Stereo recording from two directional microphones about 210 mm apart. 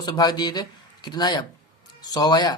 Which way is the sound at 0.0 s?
20° left (ahead or behind).